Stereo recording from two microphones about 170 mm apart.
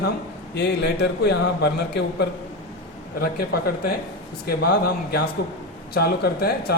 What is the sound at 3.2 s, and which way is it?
A man's voice, 65° left (ahead or behind).